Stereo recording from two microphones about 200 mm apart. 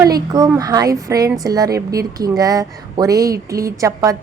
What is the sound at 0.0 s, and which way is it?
A woman's voice, 15° right (ahead or behind).